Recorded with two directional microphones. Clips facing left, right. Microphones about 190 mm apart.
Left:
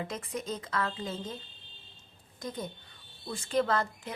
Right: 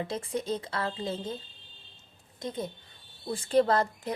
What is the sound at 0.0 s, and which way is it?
A woman's voice, 30° right (ahead or behind).